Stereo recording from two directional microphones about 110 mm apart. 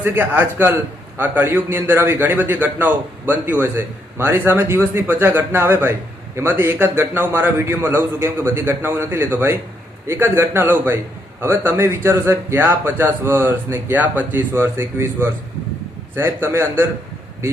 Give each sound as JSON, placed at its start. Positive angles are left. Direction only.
{"t": 0.0, "sound": "a man's voice", "side_deg": -20}